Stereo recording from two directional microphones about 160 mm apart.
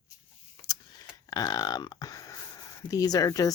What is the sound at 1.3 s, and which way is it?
Speech, 25° left (ahead or behind).